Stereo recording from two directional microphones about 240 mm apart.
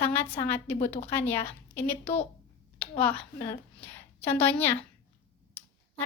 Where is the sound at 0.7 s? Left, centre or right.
Left.